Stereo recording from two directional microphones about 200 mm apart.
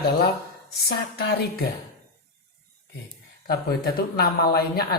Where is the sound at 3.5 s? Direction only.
50° left (ahead or behind).